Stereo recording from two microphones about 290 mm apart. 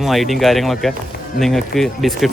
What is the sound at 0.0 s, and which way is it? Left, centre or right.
Speech, centre.